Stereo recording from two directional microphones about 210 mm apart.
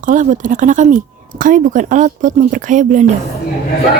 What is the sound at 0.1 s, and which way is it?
Speech, 40° right (ahead or behind).